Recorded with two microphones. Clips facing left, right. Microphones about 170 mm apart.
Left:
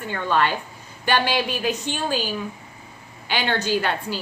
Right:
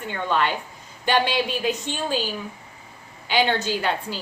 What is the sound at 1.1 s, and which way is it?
A woman's voice, 20° right (ahead or behind).